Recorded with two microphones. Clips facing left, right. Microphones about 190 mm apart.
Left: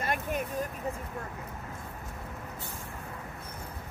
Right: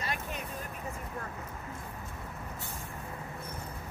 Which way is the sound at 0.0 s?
50° left (ahead or behind).